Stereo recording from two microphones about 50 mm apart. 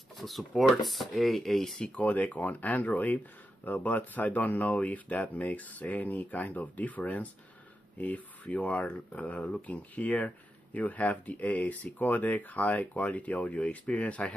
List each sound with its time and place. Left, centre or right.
0.2 s speech: centre
2.0 s speech: left